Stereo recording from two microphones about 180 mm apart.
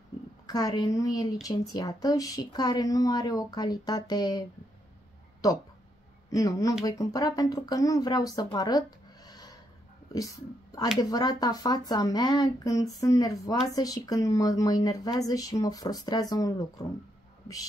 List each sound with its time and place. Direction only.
0.5 s speech: 20° left (ahead or behind)
6.3 s speech: 20° left (ahead or behind)